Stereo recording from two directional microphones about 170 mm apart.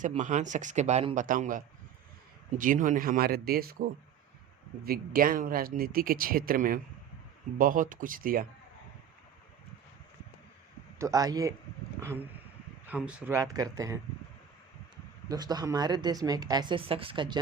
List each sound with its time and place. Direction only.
0.0 s a man's voice: 45° right (ahead or behind); by 3.8 s 60° right (ahead or behind)
4.9 s a man's voice: 55° right (ahead or behind)
10.9 s speech: 20° right (ahead or behind)
13.3 s speech: 20° right (ahead or behind)
15.3 s speech: 25° right (ahead or behind)